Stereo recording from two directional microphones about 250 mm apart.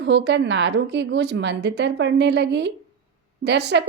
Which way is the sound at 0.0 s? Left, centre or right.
Right.